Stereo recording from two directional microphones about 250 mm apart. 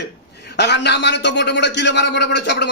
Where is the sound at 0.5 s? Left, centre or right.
Left.